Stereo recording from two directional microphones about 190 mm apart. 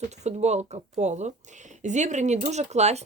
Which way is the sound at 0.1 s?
35° right (ahead or behind).